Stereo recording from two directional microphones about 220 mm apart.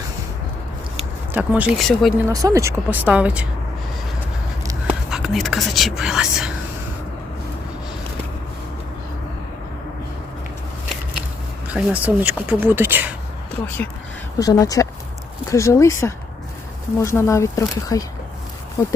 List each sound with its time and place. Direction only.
1.3 s speech: 5° right (ahead or behind)
2.3 s speech: 15° right (ahead or behind)
4.6 s a sound: 15° right (ahead or behind)
5.1 s speech: centre (ahead or behind)
11.7 s speech: 5° right (ahead or behind)
14.3 s speech: 15° left (ahead or behind)